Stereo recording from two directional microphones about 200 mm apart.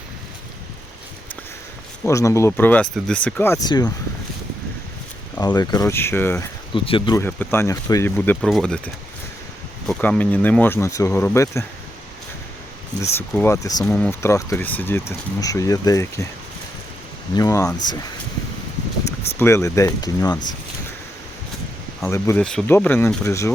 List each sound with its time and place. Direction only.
2.0 s speech: 15° left (ahead or behind)
5.4 s speech: 20° left (ahead or behind)
6.7 s speech: 25° left (ahead or behind)
7.2 s speech: 10° left (ahead or behind)
8.4 s speech: centre (ahead or behind)
13.0 s speech: 10° left (ahead or behind)
13.8 s speech: 5° left (ahead or behind)
17.3 s speech: 15° left (ahead or behind)
19.4 s speech: 15° left (ahead or behind)
22.0 s speech: 15° left (ahead or behind)